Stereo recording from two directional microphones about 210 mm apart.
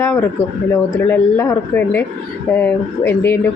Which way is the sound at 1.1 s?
10° left (ahead or behind).